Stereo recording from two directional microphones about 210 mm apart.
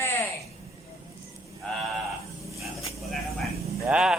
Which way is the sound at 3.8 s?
5° right (ahead or behind).